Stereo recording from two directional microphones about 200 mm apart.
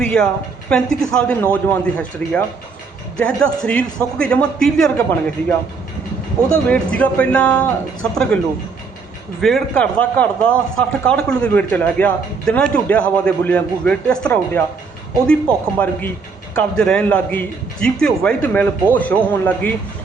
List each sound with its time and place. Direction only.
0.0 s a woman's voice: 5° left (ahead or behind)
6.5 s a man's voice: 5° left (ahead or behind)
9.4 s a man's voice: centre (ahead or behind)